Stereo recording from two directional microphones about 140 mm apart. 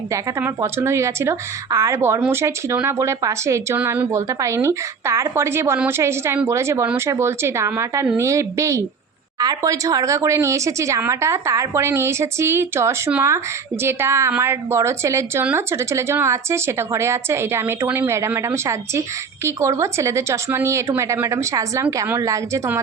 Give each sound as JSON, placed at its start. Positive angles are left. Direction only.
{"t": 0.1, "sound": "a woman's voice", "side_deg": -20}